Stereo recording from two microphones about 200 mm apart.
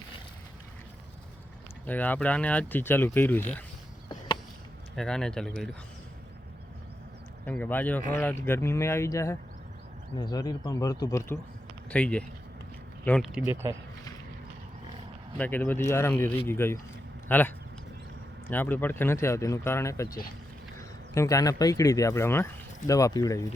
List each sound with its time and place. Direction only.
1.9 s speech: 10° left (ahead or behind)
4.9 s speech: 5° left (ahead or behind)
7.4 s speech: 10° left (ahead or behind)
11.9 s speech: 5° left (ahead or behind); by 13.7 s 10° right (ahead or behind)
15.4 s speech: 10° left (ahead or behind)